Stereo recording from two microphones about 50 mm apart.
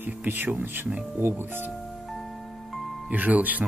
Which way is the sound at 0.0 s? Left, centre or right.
Right.